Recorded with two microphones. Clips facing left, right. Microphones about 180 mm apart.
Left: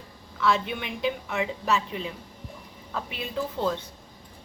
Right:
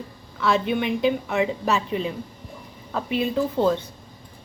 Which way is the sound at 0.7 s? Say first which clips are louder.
Right 8 dB; 35° right (ahead or behind).